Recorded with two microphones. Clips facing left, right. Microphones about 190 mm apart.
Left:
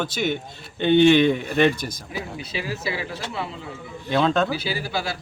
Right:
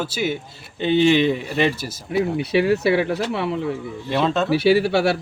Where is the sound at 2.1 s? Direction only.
65° right (ahead or behind).